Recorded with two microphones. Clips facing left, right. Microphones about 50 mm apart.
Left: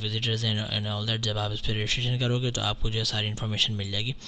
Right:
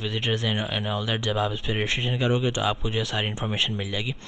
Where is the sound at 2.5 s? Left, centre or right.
Right.